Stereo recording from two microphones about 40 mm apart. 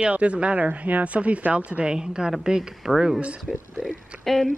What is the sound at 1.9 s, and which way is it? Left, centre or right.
Speech, right.